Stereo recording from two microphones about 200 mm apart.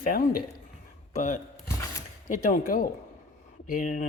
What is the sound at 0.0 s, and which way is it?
A man's voice, 45° left (ahead or behind).